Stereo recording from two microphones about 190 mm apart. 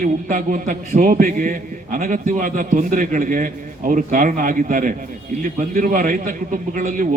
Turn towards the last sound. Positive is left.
turn(degrees=-40)  # may be behind; listen again after turning